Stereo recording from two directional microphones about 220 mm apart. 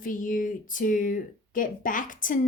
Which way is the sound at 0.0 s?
35° left (ahead or behind).